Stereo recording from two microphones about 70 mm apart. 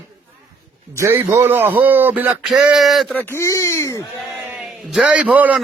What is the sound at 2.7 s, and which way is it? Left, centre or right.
Speech, centre.